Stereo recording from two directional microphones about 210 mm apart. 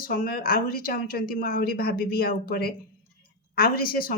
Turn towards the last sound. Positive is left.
turn(degrees=45)  # may be behind; listen again after turning